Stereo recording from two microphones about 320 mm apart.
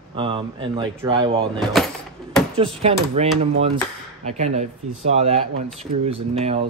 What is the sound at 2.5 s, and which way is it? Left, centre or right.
Speech, centre.